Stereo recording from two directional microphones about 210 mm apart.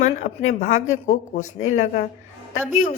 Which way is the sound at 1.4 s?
70° left (ahead or behind).